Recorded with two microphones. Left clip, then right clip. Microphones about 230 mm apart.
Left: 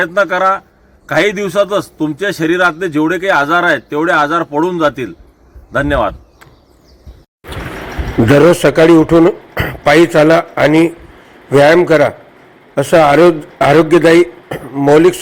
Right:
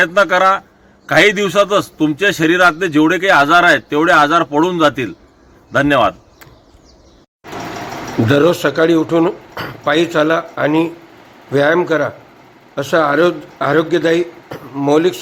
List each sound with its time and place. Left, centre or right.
0.0 s a man's voice: centre
5.7 s a sound: centre
8.3 s speech: centre